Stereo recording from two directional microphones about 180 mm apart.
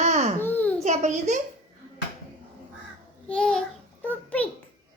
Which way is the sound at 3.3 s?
5° left (ahead or behind).